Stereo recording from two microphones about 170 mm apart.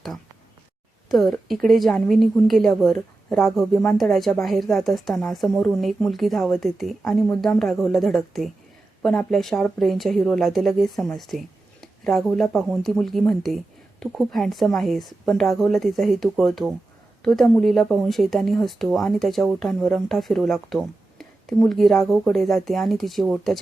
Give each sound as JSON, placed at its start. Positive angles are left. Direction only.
{"t": 1.1, "sound": "speech", "side_deg": 0}